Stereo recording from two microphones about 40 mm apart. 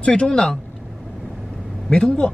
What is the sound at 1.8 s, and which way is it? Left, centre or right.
Speech, left.